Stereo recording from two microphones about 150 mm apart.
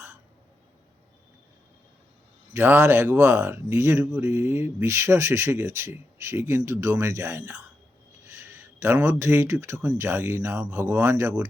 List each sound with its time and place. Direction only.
2.5 s speech: 15° right (ahead or behind)